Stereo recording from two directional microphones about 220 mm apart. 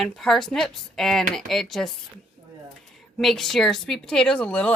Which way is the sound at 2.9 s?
Centre (ahead or behind).